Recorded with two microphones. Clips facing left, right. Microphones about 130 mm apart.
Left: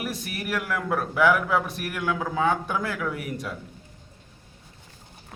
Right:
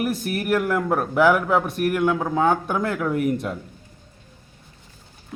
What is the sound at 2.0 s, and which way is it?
Speech, 25° right (ahead or behind).